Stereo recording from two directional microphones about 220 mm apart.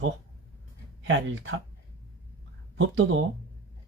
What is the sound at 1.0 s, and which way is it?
Speech, 60° right (ahead or behind).